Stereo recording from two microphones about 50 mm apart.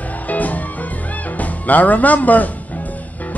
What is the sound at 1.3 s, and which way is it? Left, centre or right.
Speech, left.